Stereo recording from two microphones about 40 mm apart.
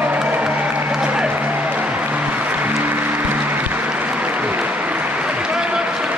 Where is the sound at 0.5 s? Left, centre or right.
Right.